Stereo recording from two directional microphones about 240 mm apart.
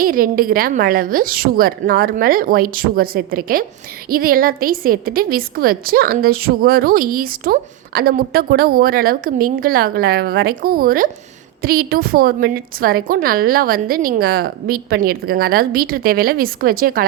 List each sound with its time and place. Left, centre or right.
0.0 s a woman's voice: right